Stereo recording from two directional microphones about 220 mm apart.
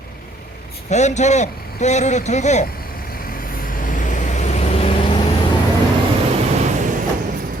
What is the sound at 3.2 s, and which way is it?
Vehicle, 40° left (ahead or behind).